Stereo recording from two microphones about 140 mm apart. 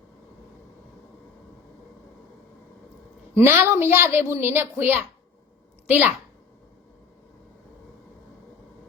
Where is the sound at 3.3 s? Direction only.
15° right (ahead or behind).